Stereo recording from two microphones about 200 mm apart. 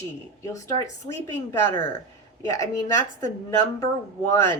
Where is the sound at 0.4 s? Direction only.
15° left (ahead or behind).